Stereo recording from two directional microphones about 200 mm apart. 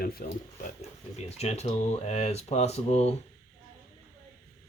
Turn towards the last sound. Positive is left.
turn(degrees=30)  # may be behind; listen again after turning